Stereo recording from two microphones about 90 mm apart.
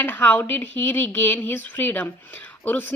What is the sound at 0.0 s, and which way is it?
Speech, 20° left (ahead or behind).